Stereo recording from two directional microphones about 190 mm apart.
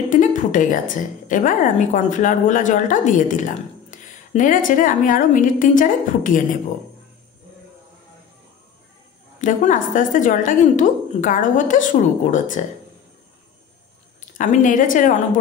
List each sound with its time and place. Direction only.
0.1 s a woman's voice: 40° left (ahead or behind)
9.4 s a woman's voice: 45° left (ahead or behind)
14.4 s a woman's voice: 40° left (ahead or behind)